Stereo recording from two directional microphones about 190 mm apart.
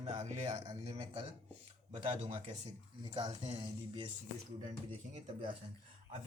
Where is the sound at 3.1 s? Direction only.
25° right (ahead or behind).